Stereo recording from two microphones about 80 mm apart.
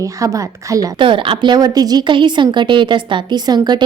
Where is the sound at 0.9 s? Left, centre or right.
Right.